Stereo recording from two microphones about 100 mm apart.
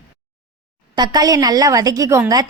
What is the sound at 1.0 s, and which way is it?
A woman's voice, 40° right (ahead or behind).